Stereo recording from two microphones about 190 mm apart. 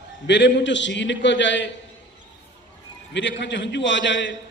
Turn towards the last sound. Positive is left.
turn(degrees=70)  # may be behind; listen again after turning